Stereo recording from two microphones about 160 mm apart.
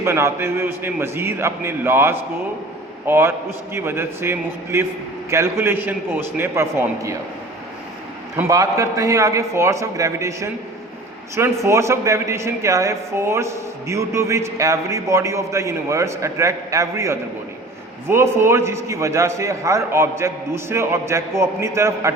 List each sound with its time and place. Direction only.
0.0 s a man's voice: 15° right (ahead or behind)
8.4 s a man's voice: 20° right (ahead or behind)